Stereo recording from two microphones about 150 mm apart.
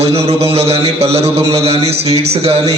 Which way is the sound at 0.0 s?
45° right (ahead or behind).